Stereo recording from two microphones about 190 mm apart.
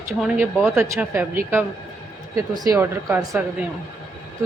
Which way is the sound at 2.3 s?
20° right (ahead or behind).